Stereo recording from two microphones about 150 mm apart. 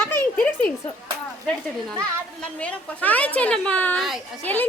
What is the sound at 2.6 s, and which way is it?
Speech, 10° left (ahead or behind).